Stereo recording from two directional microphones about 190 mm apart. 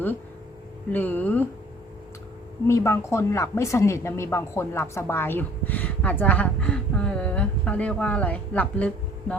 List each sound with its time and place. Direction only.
0.9 s speech: 10° left (ahead or behind)
2.6 s speech: 15° left (ahead or behind)